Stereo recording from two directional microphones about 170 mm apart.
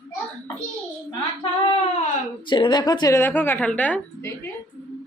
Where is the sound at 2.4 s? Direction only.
25° left (ahead or behind); by 4.3 s 10° left (ahead or behind).